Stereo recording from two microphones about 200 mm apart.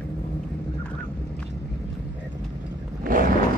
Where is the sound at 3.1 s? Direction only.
45° right (ahead or behind).